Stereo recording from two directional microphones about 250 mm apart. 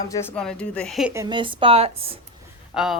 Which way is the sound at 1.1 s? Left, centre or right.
Centre.